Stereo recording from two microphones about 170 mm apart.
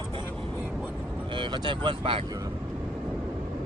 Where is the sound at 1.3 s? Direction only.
25° right (ahead or behind).